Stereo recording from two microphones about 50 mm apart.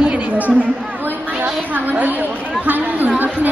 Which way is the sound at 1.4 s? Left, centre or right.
Right.